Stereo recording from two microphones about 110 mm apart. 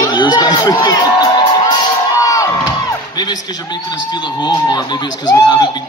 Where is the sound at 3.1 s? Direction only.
40° left (ahead or behind).